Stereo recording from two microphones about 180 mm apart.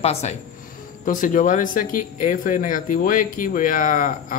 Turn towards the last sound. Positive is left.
turn(degrees=50)  # may be behind; listen again after turning